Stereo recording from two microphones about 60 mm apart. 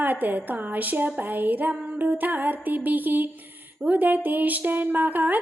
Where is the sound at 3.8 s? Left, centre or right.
Right.